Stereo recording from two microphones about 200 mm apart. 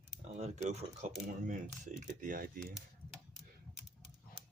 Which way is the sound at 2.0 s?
40° right (ahead or behind).